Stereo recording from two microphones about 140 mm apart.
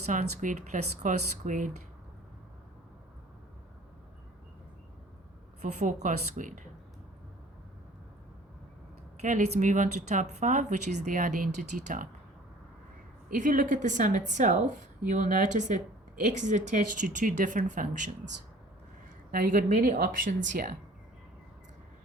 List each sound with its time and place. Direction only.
0.0 s speech: 60° right (ahead or behind)
5.6 s speech: 65° right (ahead or behind)
9.2 s speech: 60° right (ahead or behind); by 12.0 s 80° right
13.2 s speech: 75° right (ahead or behind)
19.3 s speech: 90° right